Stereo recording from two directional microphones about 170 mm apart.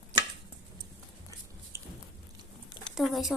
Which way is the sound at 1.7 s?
15° right (ahead or behind).